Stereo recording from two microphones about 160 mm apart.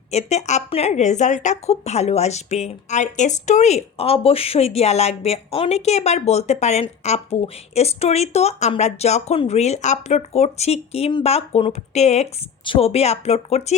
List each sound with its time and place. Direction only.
0.1 s a woman's voice: 45° left (ahead or behind)